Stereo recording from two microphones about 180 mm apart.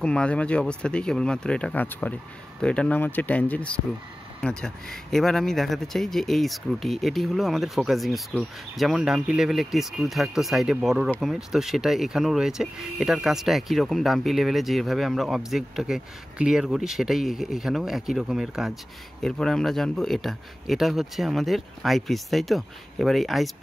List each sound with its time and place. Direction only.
0.0 s speech: 5° left (ahead or behind)